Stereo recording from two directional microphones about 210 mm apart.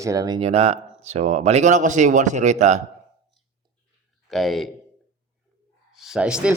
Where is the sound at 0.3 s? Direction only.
30° right (ahead or behind).